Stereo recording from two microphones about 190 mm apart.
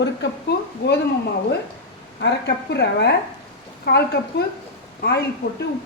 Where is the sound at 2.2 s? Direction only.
60° left (ahead or behind).